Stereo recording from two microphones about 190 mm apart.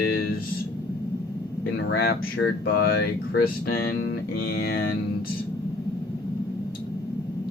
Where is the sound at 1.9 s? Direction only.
60° left (ahead or behind).